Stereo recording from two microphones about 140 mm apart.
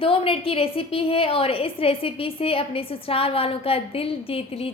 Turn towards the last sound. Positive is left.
turn(degrees=45)  # may be behind; listen again after turning